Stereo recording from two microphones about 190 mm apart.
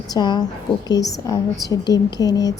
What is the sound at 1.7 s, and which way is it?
Speech, 20° left (ahead or behind).